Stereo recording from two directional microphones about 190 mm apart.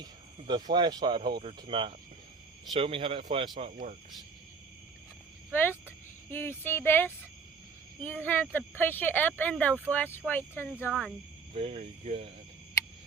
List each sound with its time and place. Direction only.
0.0 s speech: 25° right (ahead or behind)
6.3 s speech: 10° left (ahead or behind)
11.5 s speech: 35° right (ahead or behind)